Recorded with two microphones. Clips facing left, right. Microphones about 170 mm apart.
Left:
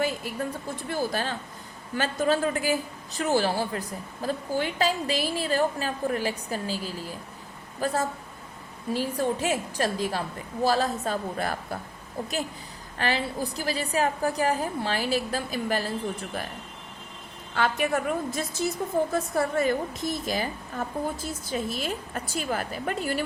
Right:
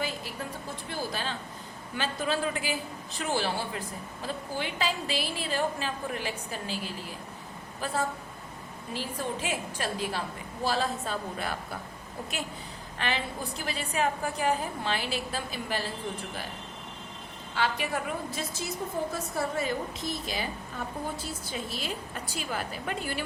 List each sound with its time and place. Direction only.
0.9 s a woman's voice: 45° left (ahead or behind)
13.0 s a woman's voice: 35° left (ahead or behind)
17.5 s a woman's voice: 50° left (ahead or behind)